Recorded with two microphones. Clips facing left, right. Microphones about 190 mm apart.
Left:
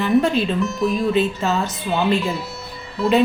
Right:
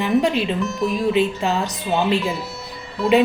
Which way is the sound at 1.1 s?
15° right (ahead or behind).